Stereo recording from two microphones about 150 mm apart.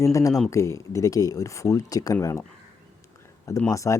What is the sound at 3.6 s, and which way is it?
Speech, 20° left (ahead or behind).